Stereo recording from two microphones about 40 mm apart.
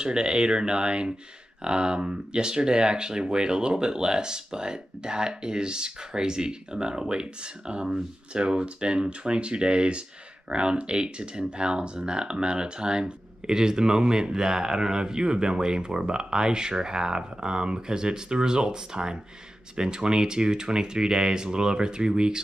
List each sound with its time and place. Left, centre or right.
0.0 s speech: right